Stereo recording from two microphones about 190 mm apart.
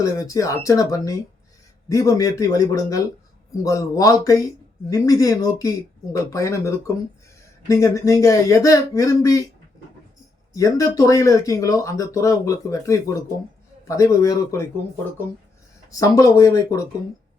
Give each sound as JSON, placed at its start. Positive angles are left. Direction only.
{"t": 0.0, "sound": "speech", "side_deg": 15}
{"t": 10.5, "sound": "speech", "side_deg": 15}
{"t": 15.9, "sound": "speech", "side_deg": 15}